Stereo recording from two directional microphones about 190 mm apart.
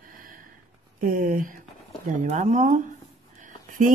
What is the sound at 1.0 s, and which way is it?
Speech, 45° right (ahead or behind).